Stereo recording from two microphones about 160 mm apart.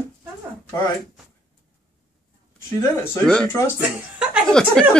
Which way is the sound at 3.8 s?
5° right (ahead or behind).